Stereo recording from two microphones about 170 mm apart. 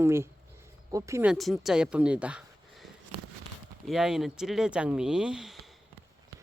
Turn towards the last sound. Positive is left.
turn(degrees=0)  # may be behind; listen again after turning